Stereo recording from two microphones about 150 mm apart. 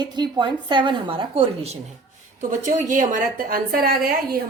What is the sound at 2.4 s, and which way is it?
A woman's voice, 55° right (ahead or behind).